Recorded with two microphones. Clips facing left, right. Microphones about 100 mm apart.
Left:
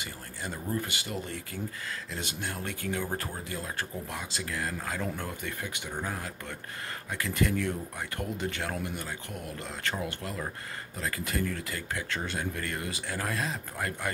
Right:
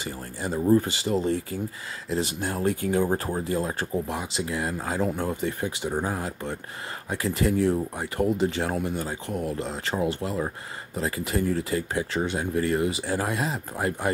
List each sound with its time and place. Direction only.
0.0 s speech: 25° right (ahead or behind)